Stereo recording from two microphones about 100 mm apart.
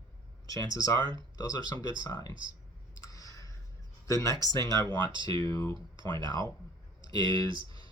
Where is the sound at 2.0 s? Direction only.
40° left (ahead or behind).